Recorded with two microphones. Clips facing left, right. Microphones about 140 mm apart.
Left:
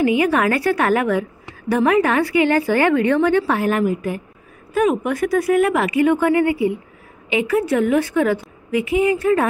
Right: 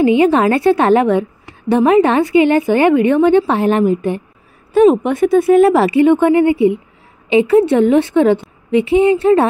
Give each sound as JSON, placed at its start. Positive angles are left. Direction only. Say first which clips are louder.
{"t": 0.0, "sound": "a woman's voice", "louder": "right 6 dB", "side_deg": -25}